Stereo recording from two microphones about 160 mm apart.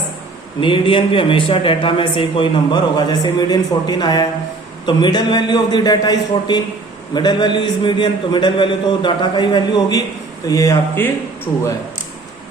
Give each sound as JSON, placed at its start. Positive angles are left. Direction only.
{"t": 0.6, "sound": "a man's voice", "side_deg": 30}